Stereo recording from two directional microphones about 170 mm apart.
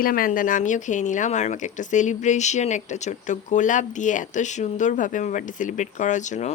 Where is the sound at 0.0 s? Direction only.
55° left (ahead or behind).